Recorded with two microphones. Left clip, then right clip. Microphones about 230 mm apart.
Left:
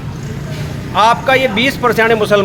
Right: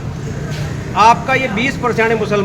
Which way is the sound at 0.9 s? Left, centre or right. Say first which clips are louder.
Even; left.